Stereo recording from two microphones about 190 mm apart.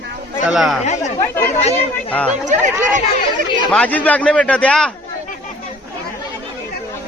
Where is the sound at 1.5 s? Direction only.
35° left (ahead or behind).